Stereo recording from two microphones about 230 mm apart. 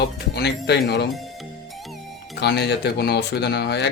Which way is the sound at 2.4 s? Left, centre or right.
Left.